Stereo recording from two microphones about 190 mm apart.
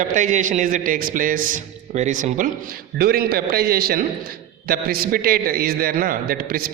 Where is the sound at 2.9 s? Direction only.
55° right (ahead or behind).